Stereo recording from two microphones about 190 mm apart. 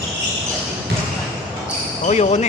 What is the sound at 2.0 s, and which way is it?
Speech, 35° left (ahead or behind).